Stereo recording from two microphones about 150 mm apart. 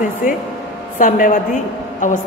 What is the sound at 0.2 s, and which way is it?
A woman's voice, 60° left (ahead or behind).